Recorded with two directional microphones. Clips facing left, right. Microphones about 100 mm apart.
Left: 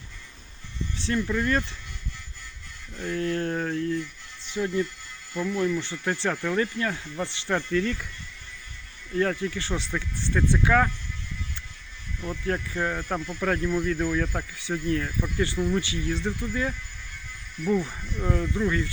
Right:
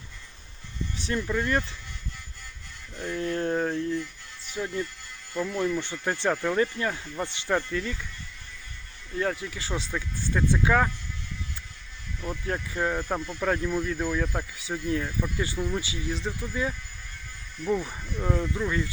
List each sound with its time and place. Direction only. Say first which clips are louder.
0.9 s speech: left 2 dB; 15° right (ahead or behind)
3.0 s speech: left 1 dB; 20° right (ahead or behind)
4.5 s speech: left 4 dB; 5° right (ahead or behind)
6.6 s speech: right 1 dB; 25° right (ahead or behind)
7.2 s speech: right 1 dB; 10° right (ahead or behind)
9.1 s speech: left 4 dB; 10° right (ahead or behind)
12.6 s speech: right 1 dB; 10° right (ahead or behind)